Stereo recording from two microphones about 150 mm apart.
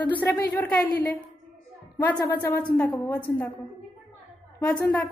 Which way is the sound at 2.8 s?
25° left (ahead or behind).